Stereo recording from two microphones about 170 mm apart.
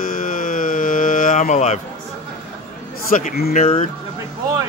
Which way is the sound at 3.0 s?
55° left (ahead or behind).